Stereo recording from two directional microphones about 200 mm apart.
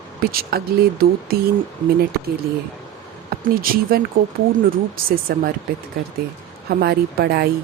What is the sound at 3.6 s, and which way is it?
Speech, 45° right (ahead or behind).